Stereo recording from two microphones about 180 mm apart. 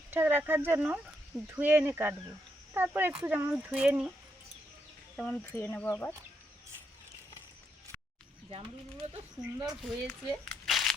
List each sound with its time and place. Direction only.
0.1 s speech: 10° right (ahead or behind)
5.1 s speech: 10° left (ahead or behind)
8.4 s speech: 30° right (ahead or behind)
9.8 s speech: 5° left (ahead or behind)